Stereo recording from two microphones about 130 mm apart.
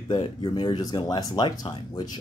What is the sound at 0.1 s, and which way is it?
Speech, 40° left (ahead or behind).